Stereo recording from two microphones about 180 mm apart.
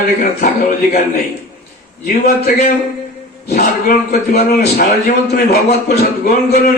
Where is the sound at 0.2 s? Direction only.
50° left (ahead or behind).